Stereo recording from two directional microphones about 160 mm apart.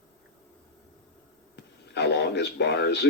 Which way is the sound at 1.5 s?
90° left.